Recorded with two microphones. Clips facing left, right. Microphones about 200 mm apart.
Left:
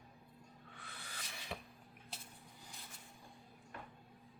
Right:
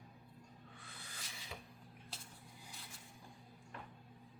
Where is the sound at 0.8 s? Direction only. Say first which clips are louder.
Left 5 dB; 70° left (ahead or behind).